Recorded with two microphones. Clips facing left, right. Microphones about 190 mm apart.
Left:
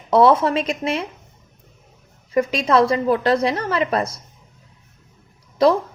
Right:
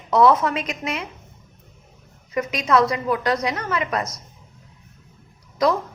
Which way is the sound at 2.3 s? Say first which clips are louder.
Left 3 dB; 30° left (ahead or behind).